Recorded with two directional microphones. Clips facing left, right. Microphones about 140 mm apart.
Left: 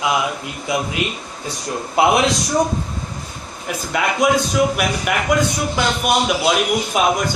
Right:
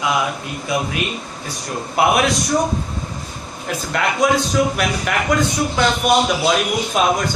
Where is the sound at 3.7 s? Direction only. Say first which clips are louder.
Even; centre (ahead or behind).